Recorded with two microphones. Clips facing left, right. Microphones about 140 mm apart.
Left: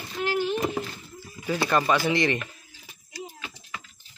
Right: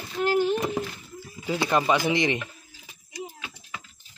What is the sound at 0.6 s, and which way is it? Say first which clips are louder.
Speech: even; centre (ahead or behind).